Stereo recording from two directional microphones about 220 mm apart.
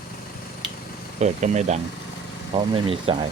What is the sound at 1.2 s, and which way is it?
Speech, 30° right (ahead or behind).